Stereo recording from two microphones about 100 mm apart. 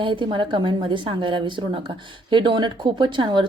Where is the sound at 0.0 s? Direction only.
55° right (ahead or behind).